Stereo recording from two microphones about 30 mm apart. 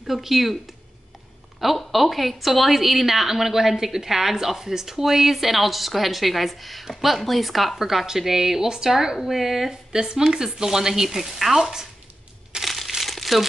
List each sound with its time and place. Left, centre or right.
0.0 s a woman's voice: centre
1.9 s a woman's voice: centre
7.8 s speech: centre
9.7 s speech: right; by 11.5 s centre
12.6 s crushing: centre
13.0 s crumpling: centre